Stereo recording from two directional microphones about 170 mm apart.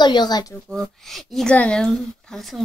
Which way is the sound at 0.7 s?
Centre (ahead or behind).